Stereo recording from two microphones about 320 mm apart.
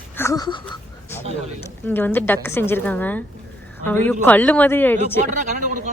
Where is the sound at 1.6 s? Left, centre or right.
Centre.